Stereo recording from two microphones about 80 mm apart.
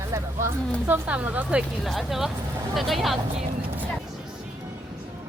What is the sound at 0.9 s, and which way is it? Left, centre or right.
Speech, right.